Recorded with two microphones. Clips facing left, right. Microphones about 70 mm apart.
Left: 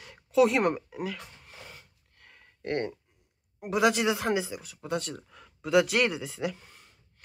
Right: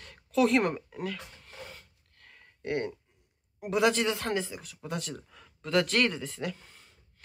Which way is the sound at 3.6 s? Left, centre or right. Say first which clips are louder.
Left 1 dB; centre.